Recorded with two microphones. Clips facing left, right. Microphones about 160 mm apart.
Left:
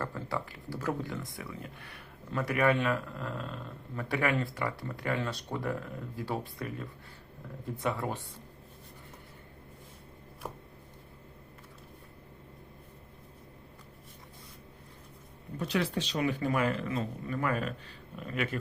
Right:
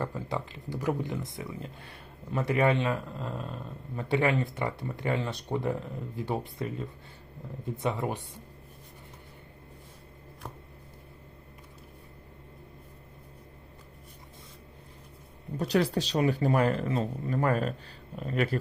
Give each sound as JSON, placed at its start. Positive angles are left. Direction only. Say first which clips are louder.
{"t": 0.0, "sound": "speech", "louder": "right 2 dB", "side_deg": -20}
{"t": 10.4, "sound": "a sound", "louder": "left 2 dB", "side_deg": 5}
{"t": 15.5, "sound": "speech", "louder": "right 5 dB", "side_deg": -40}